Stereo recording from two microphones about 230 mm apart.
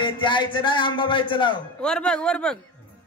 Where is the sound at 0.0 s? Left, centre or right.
Left.